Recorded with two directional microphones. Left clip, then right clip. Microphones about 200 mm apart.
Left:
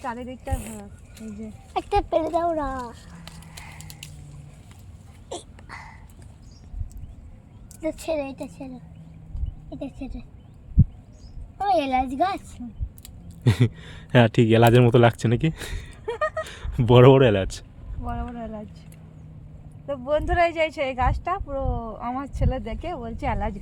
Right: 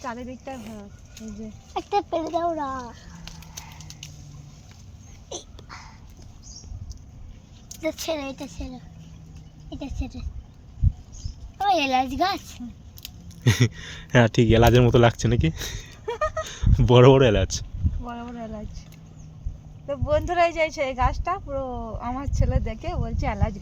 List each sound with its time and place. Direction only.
0.0 s speech: centre (ahead or behind)
0.5 s speech: 60° left (ahead or behind)
3.6 s a sound: 60° left (ahead or behind)
5.3 s a sound: 55° left (ahead or behind)
7.8 s speech: 40° left (ahead or behind)
9.6 s speech: 20° left (ahead or behind)
11.5 s a woman's voice: 20° left (ahead or behind)
13.4 s speech: 5° left (ahead or behind)
16.0 s a sound: 10° right (ahead or behind)
16.4 s speech: 5° left (ahead or behind)
18.0 s a sound: 5° right (ahead or behind)
19.9 s speech: 5° right (ahead or behind)